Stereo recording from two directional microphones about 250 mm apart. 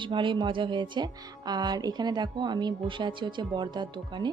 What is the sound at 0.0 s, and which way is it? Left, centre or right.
Speech, centre.